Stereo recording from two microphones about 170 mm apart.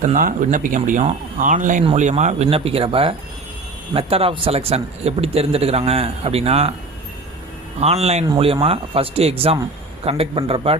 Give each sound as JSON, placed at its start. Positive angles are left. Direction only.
{"t": 0.0, "sound": "speech", "side_deg": -50}
{"t": 7.8, "sound": "speech", "side_deg": -35}